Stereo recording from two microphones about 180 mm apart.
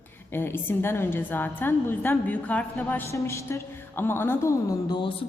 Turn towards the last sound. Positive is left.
turn(degrees=25)  # may be behind; listen again after turning